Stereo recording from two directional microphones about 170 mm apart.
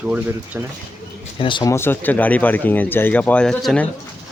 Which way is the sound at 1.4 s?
30° left (ahead or behind).